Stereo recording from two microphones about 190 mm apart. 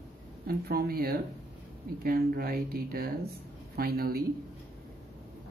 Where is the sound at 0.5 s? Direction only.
55° right (ahead or behind).